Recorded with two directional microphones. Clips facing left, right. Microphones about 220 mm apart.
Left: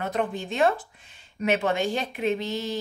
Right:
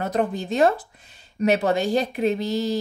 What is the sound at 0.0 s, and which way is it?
A woman's voice, 40° right (ahead or behind).